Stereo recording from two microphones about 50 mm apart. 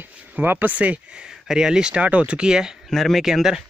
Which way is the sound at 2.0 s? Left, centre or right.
Right.